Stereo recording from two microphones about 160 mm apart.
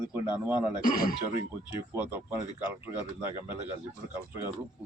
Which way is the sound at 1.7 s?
15° right (ahead or behind).